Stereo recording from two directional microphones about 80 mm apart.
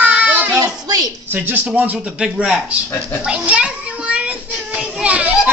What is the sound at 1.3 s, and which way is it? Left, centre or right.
Speech, right.